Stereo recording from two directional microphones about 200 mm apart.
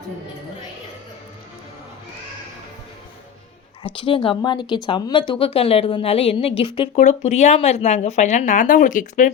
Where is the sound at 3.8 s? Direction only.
25° left (ahead or behind).